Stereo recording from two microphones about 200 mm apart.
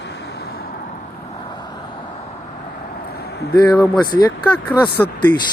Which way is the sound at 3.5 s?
20° left (ahead or behind).